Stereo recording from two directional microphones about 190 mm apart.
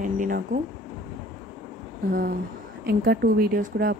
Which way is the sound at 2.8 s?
50° right (ahead or behind).